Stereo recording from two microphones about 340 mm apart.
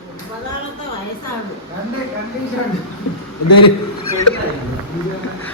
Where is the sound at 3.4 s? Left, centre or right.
Left.